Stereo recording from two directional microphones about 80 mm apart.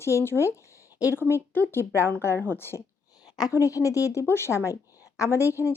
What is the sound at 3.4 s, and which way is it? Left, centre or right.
A woman's voice, left.